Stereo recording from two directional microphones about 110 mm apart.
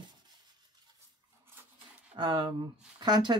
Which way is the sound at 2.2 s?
45° right (ahead or behind).